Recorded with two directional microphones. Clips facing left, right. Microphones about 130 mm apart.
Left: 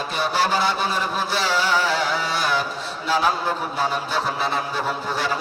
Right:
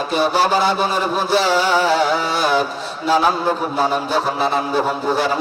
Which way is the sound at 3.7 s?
25° right (ahead or behind).